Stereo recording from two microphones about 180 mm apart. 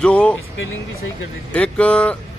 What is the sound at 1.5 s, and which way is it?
Speech, 5° left (ahead or behind).